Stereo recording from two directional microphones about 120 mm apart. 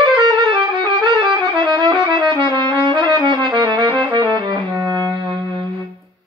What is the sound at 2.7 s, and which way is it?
Brass instrument, 40° right (ahead or behind).